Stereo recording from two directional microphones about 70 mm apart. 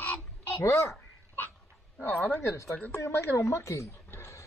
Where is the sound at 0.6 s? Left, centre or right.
Left.